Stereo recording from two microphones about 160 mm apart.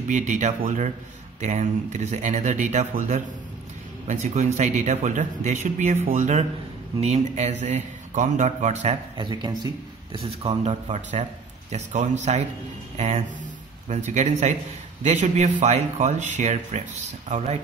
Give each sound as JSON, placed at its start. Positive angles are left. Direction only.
{"t": 0.1, "sound": "speech", "side_deg": -50}
{"t": 9.1, "sound": "speech", "side_deg": -30}
{"t": 10.1, "sound": "speech", "side_deg": -40}